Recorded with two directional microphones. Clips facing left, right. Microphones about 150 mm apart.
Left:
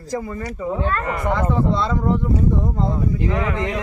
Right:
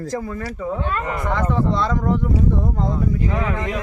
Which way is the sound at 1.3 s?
10° left (ahead or behind).